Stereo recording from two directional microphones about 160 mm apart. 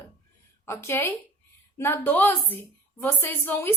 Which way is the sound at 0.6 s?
15° left (ahead or behind).